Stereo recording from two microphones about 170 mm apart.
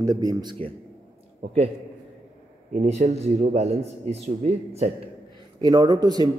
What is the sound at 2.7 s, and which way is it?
A man's voice, 40° right (ahead or behind).